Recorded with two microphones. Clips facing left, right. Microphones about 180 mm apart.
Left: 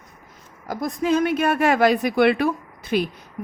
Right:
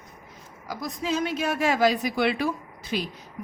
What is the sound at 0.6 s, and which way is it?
Speech, 55° left (ahead or behind).